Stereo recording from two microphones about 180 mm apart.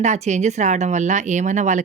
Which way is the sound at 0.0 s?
40° right (ahead or behind).